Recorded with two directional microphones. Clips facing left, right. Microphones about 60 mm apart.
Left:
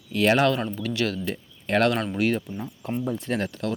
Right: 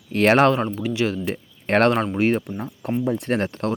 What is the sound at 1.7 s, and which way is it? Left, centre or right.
Speech, right.